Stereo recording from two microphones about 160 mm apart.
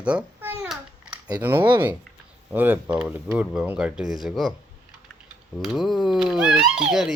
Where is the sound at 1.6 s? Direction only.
25° right (ahead or behind).